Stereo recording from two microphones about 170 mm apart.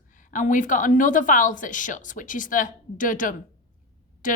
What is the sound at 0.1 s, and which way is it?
Speech, 50° left (ahead or behind).